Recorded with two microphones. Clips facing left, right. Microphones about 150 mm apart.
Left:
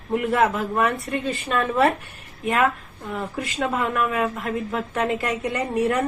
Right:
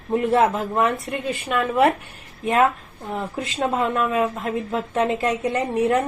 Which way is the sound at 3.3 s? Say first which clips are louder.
Right 2 dB; 25° right (ahead or behind).